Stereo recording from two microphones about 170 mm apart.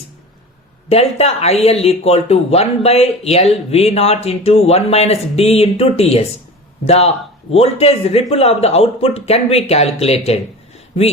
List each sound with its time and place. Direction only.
0.9 s speech: 35° left (ahead or behind)